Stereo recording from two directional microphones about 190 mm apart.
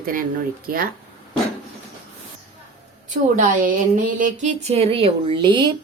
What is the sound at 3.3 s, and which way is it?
A woman's voice, 45° right (ahead or behind).